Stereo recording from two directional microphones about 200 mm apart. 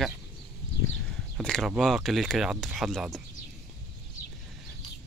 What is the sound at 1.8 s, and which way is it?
Speech, centre (ahead or behind).